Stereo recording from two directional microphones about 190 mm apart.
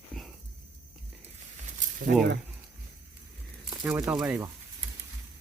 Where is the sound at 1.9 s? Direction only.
50° right (ahead or behind).